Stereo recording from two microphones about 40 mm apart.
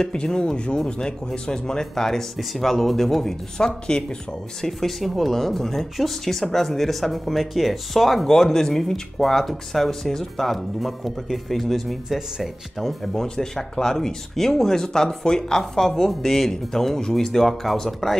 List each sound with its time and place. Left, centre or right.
0.0 s speech: centre
3.5 s speech: left
4.6 s speech: centre